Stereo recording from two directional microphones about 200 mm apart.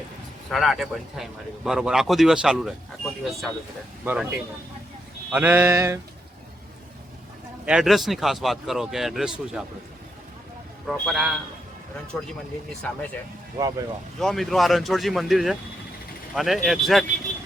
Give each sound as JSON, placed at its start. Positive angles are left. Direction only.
{"t": 0.5, "sound": "speech", "side_deg": 0}
{"t": 4.0, "sound": "a sound", "side_deg": -10}
{"t": 5.3, "sound": "a sound", "side_deg": -10}
{"t": 7.6, "sound": "speech", "side_deg": -5}
{"t": 10.8, "sound": "speech", "side_deg": 0}
{"t": 12.8, "sound": "speech", "side_deg": 5}
{"t": 13.6, "sound": "speech", "side_deg": -20}
{"t": 14.2, "sound": "speech", "side_deg": 0}